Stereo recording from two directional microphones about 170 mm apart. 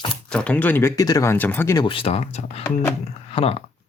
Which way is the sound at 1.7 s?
30° left (ahead or behind).